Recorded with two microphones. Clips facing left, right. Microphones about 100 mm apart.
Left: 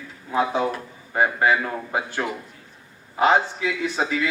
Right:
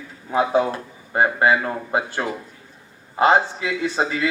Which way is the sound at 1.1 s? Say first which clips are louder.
Right 2 dB; 30° right (ahead or behind).